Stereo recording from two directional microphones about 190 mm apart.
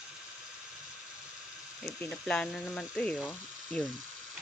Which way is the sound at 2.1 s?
5° left (ahead or behind).